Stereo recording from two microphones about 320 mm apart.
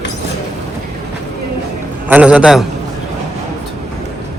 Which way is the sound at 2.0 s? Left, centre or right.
Centre.